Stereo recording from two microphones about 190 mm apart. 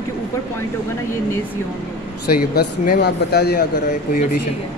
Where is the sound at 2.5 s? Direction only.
55° left (ahead or behind).